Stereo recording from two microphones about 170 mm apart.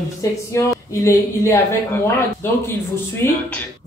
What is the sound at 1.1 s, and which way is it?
Speech, 15° left (ahead or behind).